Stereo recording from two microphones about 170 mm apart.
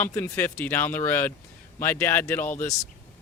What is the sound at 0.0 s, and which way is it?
Speech, 10° left (ahead or behind).